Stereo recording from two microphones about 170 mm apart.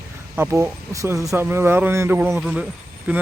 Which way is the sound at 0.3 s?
15° right (ahead or behind).